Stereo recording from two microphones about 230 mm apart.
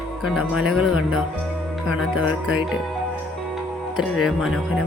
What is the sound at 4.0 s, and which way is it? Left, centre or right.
Speech, centre.